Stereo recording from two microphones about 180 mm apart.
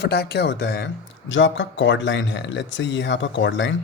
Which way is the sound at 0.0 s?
65° left (ahead or behind).